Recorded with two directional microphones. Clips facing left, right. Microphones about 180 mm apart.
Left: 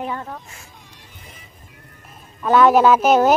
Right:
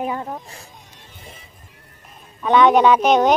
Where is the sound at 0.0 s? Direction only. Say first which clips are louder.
Right 3 dB; 15° right (ahead or behind).